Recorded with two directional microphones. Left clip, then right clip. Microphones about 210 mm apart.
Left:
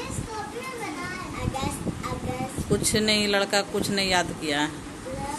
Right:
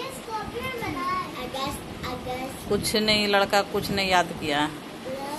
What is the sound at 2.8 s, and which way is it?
Speech, 15° left (ahead or behind).